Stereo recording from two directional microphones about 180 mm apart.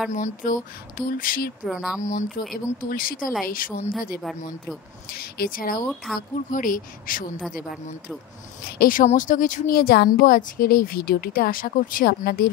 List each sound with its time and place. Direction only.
0.1 s speech: 45° left (ahead or behind)
1.6 s speech: centre (ahead or behind)
2.0 s speech: 45° left (ahead or behind)
2.5 s speech: 55° left (ahead or behind)
5.1 s speech: 55° left (ahead or behind)
8.6 s speech: 55° left (ahead or behind)